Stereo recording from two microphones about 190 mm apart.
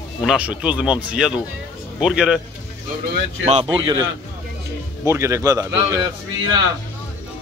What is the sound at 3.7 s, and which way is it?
Speech, 25° right (ahead or behind).